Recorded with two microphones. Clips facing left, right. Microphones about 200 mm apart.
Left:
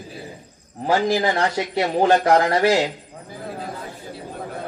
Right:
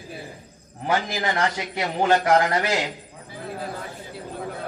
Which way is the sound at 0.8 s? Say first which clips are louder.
Left 6 dB; 35° left (ahead or behind).